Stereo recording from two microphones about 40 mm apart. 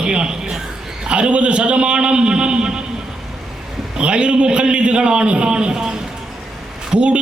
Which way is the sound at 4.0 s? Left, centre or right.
Right.